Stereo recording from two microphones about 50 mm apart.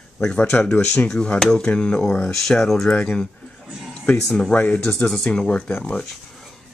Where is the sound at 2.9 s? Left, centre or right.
Left.